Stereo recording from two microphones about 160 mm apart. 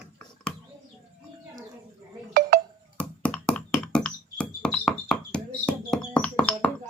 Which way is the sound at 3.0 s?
10° left (ahead or behind).